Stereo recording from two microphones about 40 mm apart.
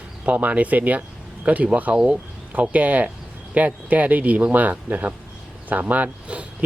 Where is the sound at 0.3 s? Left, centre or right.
Right.